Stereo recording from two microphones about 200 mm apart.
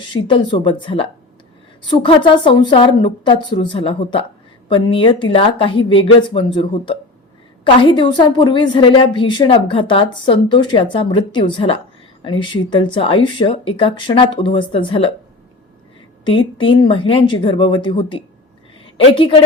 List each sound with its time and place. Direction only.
0.1 s a woman's voice: 25° left (ahead or behind)
16.2 s a woman's voice: 25° left (ahead or behind)